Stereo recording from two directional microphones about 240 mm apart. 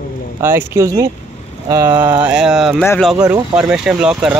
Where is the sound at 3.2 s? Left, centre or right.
Centre.